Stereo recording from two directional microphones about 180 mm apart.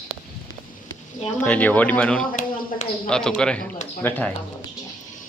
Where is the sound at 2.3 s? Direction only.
45° left (ahead or behind).